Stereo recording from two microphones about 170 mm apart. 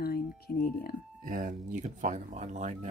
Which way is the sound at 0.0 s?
60° left (ahead or behind).